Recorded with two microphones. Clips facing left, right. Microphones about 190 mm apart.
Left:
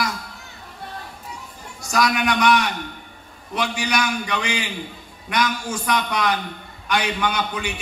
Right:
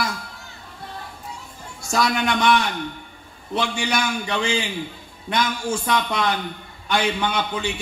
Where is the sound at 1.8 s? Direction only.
25° right (ahead or behind).